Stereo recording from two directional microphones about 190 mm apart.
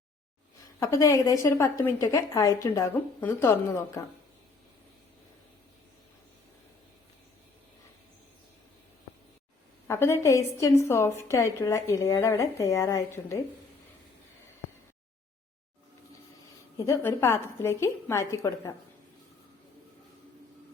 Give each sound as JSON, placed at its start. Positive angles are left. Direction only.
{"t": 0.8, "sound": "a woman's voice", "side_deg": 15}
{"t": 9.8, "sound": "a woman's voice", "side_deg": 15}
{"t": 16.7, "sound": "a woman's voice", "side_deg": 15}